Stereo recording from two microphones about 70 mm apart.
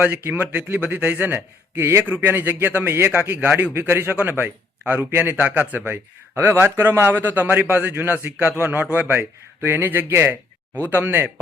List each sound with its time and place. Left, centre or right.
0.2 s a man's voice: right